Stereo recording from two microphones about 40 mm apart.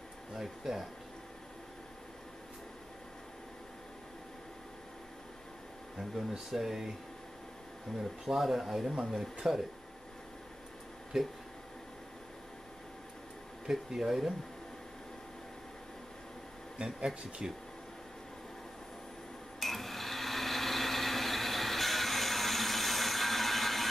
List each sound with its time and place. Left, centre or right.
0.3 s speech: centre
5.9 s speech: centre
8.0 s speech: centre
11.1 s speech: centre
13.7 s speech: centre
16.7 s speech: centre
19.6 s a sound: centre